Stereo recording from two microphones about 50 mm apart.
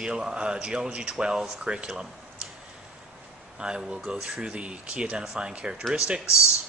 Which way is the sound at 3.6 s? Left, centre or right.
Centre.